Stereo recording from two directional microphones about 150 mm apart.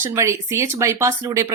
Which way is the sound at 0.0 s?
20° right (ahead or behind).